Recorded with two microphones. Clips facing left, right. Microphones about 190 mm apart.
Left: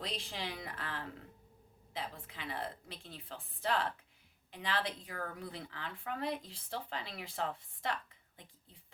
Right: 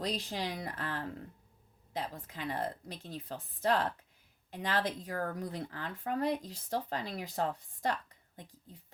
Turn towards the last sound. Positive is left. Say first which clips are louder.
# right 4 dB
turn(degrees=-40)  # may be behind; listen again after turning